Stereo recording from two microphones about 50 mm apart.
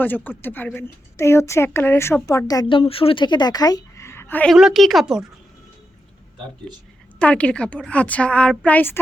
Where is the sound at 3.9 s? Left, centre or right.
Left.